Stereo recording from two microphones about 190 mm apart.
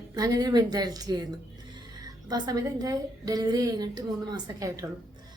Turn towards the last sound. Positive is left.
turn(degrees=-20)  # may be behind; listen again after turning